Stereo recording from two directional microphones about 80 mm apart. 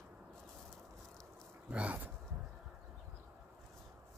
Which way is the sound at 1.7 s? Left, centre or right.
Centre.